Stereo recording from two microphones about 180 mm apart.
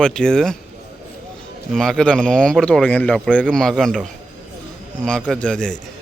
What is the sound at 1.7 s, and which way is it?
Speech, 5° left (ahead or behind).